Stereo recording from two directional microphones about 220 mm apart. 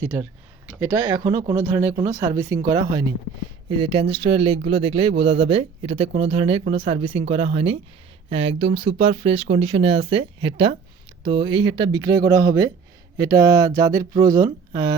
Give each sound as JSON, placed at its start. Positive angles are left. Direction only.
{"t": 0.8, "sound": "speech", "side_deg": -20}